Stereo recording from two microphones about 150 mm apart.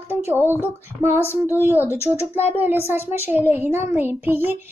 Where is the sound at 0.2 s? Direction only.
15° right (ahead or behind).